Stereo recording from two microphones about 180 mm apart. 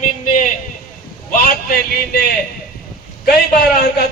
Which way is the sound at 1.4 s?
55° left (ahead or behind).